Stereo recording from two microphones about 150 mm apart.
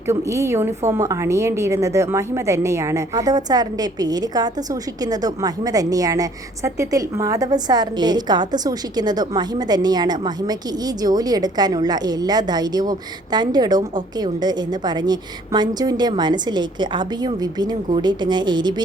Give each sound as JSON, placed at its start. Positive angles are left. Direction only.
{"t": 0.1, "sound": "a woman's voice", "side_deg": -20}